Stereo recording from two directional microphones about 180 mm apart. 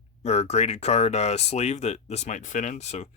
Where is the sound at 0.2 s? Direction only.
40° left (ahead or behind).